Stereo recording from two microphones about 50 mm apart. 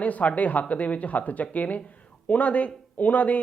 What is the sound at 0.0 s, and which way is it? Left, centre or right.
Speech, left.